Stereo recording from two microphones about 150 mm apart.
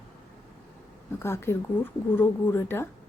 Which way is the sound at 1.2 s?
15° left (ahead or behind).